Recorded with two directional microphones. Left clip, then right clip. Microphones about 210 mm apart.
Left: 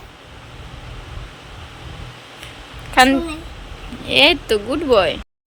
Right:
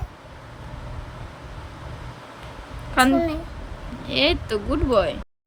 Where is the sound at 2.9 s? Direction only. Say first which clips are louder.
Left 5 dB; 5° right (ahead or behind).